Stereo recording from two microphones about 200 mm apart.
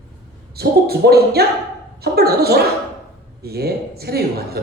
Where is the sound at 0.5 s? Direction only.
50° right (ahead or behind).